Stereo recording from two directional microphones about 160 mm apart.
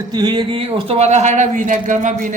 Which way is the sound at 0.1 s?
30° right (ahead or behind).